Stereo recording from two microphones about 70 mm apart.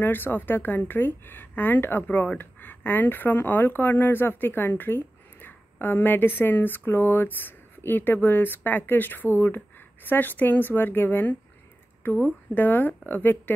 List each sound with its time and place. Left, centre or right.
0.0 s speech: left